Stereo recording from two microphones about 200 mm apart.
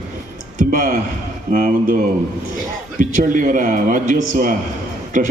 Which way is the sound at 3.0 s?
40° right (ahead or behind).